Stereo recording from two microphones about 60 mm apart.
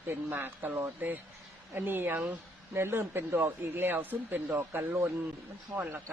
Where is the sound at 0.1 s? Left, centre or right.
Right.